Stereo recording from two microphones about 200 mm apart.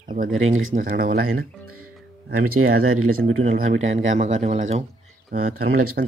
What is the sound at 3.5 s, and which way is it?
Speech, 40° right (ahead or behind).